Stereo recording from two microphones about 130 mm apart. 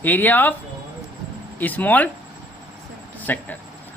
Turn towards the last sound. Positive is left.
turn(degrees=15)  # may be behind; listen again after turning